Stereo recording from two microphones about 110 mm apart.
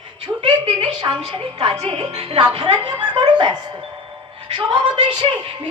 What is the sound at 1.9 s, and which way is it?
Speech, 60° right (ahead or behind).